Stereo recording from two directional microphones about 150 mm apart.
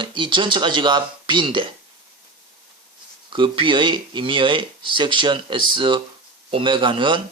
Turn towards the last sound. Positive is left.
turn(degrees=-35)  # may be behind; listen again after turning